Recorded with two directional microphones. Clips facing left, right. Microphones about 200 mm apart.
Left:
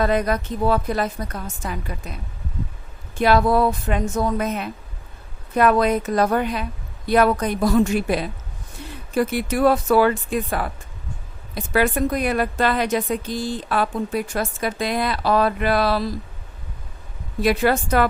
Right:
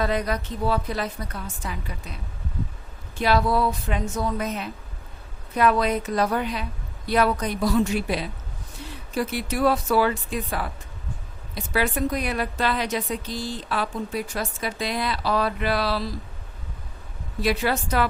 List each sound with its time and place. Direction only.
0.0 s a woman's voice: 50° left (ahead or behind)
3.2 s a woman's voice: 50° left (ahead or behind)
17.4 s a woman's voice: 50° left (ahead or behind)